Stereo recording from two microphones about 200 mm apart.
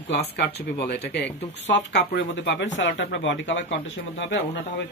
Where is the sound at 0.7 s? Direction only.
55° left (ahead or behind).